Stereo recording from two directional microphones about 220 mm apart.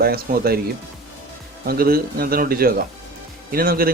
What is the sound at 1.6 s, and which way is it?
A man's voice, 40° right (ahead or behind).